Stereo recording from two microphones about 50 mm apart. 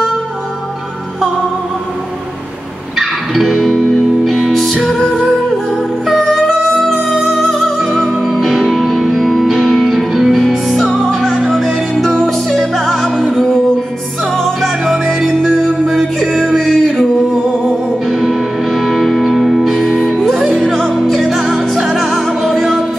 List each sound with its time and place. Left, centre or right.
3.0 s music: centre
14.3 s music: centre
20.3 s music: centre
20.6 s music: centre
21.5 s music: centre
21.9 s music: centre